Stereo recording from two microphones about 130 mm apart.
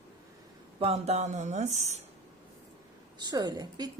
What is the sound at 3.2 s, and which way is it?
Speech, 30° right (ahead or behind).